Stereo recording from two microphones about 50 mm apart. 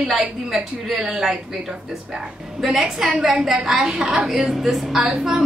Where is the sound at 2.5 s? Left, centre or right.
Centre.